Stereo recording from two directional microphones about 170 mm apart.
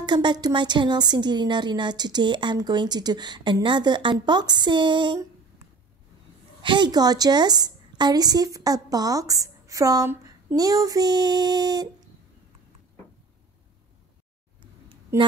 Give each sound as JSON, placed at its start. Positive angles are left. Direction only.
{"t": 0.0, "sound": "a woman's voice", "side_deg": -25}
{"t": 6.6, "sound": "a woman's voice", "side_deg": -25}